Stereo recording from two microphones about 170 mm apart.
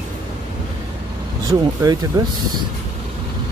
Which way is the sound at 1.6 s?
25° right (ahead or behind).